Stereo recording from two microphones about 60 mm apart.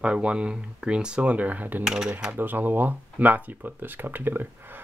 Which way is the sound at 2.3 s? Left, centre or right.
Right.